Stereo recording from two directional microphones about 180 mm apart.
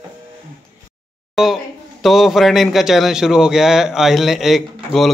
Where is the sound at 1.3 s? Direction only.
Centre (ahead or behind).